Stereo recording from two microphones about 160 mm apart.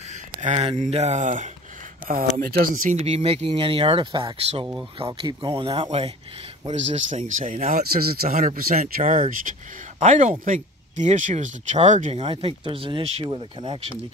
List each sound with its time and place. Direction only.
0.4 s speech: 45° right (ahead or behind)
2.0 s speech: 60° right (ahead or behind)
3.0 s speech: 40° right (ahead or behind)
7.9 s speech: 70° right (ahead or behind)
9.9 s speech: 50° right (ahead or behind); by 13.9 s 30° right (ahead or behind)